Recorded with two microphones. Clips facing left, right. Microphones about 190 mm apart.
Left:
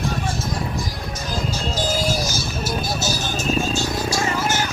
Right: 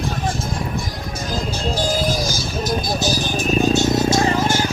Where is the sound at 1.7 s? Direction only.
15° right (ahead or behind).